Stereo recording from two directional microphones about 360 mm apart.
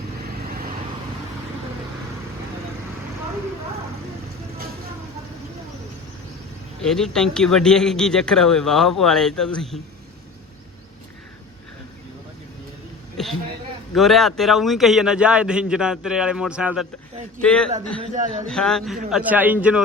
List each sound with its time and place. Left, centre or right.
6.8 s speech: centre
13.2 s a sound: centre
13.9 s speech: centre
18.0 s a man's voice: centre
18.4 s speech: centre